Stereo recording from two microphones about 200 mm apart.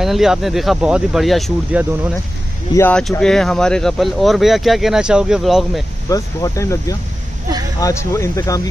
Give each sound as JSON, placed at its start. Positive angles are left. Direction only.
{"t": 0.0, "sound": "speech", "side_deg": 0}
{"t": 2.7, "sound": "speech", "side_deg": 10}
{"t": 6.0, "sound": "speech", "side_deg": 15}